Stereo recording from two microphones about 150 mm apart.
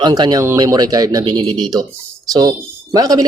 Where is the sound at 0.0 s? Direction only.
25° right (ahead or behind).